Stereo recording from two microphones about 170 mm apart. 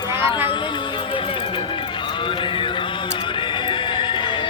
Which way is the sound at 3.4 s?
30° left (ahead or behind).